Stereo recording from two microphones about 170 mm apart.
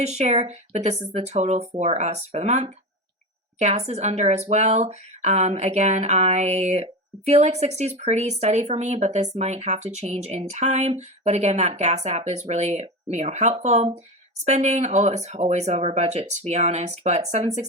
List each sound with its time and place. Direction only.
0.0 s speech: 40° right (ahead or behind)